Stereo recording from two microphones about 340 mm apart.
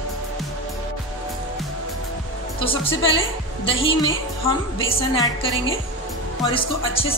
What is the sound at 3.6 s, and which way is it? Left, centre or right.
A woman's voice, centre.